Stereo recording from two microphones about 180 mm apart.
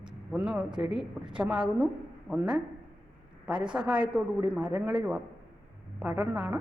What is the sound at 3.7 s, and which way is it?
A woman's voice, 5° right (ahead or behind).